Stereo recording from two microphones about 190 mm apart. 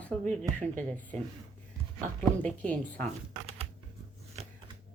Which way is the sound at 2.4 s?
5° left (ahead or behind).